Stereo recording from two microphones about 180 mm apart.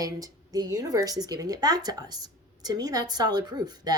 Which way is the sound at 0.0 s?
20° right (ahead or behind).